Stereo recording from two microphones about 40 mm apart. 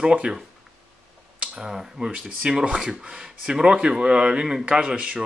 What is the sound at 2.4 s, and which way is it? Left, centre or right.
Speech, right.